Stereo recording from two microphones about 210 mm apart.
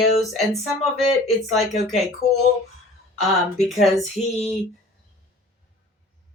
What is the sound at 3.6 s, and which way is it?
Speech, centre (ahead or behind).